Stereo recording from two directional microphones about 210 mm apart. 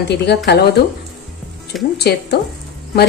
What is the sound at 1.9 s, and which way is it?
Speech, 50° left (ahead or behind).